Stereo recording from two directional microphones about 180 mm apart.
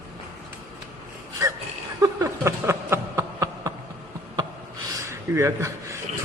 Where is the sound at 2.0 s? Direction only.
20° right (ahead or behind).